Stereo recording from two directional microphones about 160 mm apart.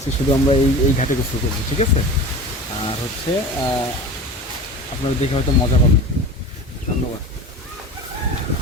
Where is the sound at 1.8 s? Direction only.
45° left (ahead or behind).